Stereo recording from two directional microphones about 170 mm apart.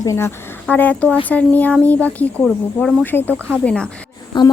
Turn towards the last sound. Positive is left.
turn(degrees=30)  # may be behind; listen again after turning